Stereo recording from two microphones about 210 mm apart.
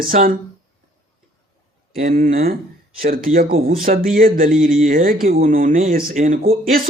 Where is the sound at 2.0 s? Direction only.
45° right (ahead or behind).